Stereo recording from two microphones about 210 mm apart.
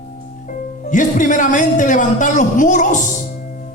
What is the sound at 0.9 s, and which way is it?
A man's voice, 40° left (ahead or behind).